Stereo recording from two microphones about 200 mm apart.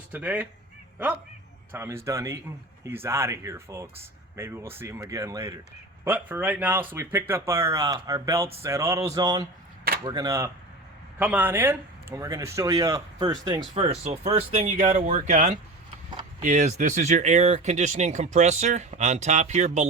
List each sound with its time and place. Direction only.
0.1 s speech: 10° right (ahead or behind)
1.7 s speech: 10° right (ahead or behind); by 19.9 s 35° right (ahead or behind)